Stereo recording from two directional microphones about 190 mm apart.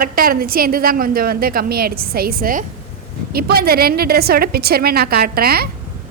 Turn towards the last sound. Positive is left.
turn(degrees=-55)  # may be behind; listen again after turning